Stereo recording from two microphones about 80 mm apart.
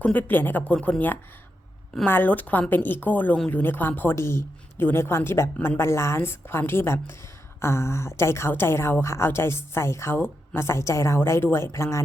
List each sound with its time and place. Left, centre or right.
0.0 s a woman's voice: left
4.1 s a woman's voice: left